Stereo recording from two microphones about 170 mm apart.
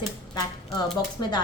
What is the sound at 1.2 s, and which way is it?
Speech, 25° left (ahead or behind).